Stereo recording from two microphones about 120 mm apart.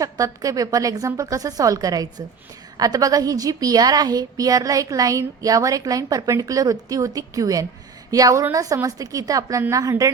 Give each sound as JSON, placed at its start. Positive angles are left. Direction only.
{"t": 0.0, "sound": "a woman's voice", "side_deg": -30}